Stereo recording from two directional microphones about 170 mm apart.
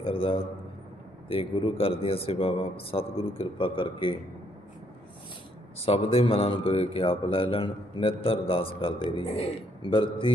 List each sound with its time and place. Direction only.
0.0 s a man's voice: 30° left (ahead or behind)
5.8 s a man's voice: 35° left (ahead or behind)